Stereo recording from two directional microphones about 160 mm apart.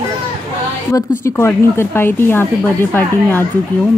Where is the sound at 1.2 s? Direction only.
15° left (ahead or behind).